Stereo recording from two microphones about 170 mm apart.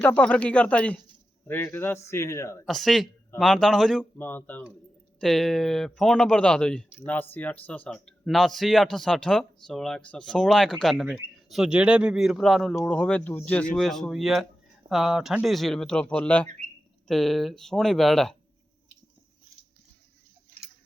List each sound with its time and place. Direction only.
0.0 s a man's voice: 10° left (ahead or behind)
2.6 s speech: centre (ahead or behind)